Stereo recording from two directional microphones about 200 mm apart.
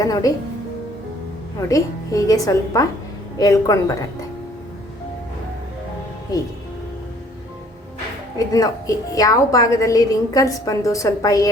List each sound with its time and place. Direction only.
0.0 s a woman's voice: 20° left (ahead or behind)
1.6 s a woman's voice: 15° left (ahead or behind)
8.4 s a woman's voice: 15° left (ahead or behind)